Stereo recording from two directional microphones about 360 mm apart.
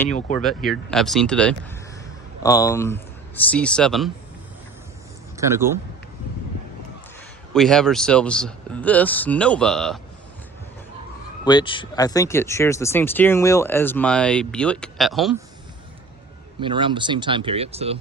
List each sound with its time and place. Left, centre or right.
0.1 s speech: centre
0.3 s a man's voice: centre
5.4 s speech: centre
7.5 s a man's voice: centre
11.4 s speech: centre
16.6 s speech: centre